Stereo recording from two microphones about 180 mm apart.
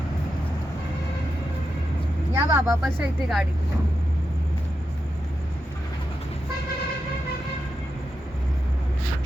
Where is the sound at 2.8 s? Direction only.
Centre (ahead or behind).